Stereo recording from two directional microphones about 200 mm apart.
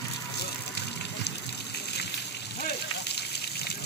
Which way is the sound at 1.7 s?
55° left (ahead or behind).